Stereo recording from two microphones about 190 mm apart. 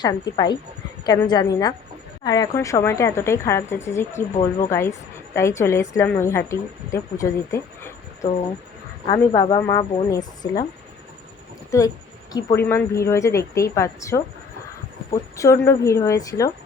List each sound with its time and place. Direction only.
0.0 s a woman's voice: 20° left (ahead or behind)
11.7 s a woman's voice: 15° left (ahead or behind)
15.4 s a woman's voice: 15° left (ahead or behind)